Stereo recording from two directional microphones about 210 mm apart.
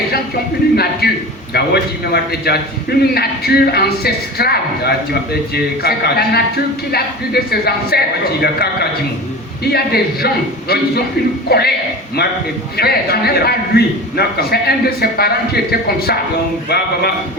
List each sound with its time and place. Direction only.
1.0 s a man's voice: 50° left (ahead or behind)
12.7 s a man's voice: 50° left (ahead or behind)